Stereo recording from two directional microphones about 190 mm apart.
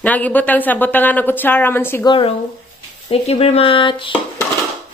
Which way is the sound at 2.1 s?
25° left (ahead or behind).